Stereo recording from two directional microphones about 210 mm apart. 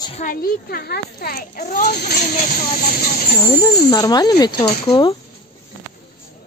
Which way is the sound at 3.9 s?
20° left (ahead or behind).